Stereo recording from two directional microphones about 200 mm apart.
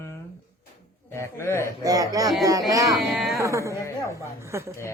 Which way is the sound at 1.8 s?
15° right (ahead or behind).